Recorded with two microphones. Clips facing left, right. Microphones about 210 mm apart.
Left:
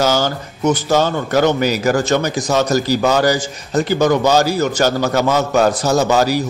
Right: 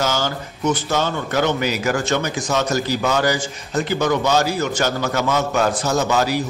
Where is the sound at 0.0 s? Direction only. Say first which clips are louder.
Left 5 dB; 40° left (ahead or behind).